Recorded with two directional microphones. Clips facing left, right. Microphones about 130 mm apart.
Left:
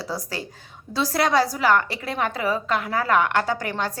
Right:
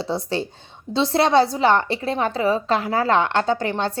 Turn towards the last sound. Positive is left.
turn(degrees=-25)  # may be behind; listen again after turning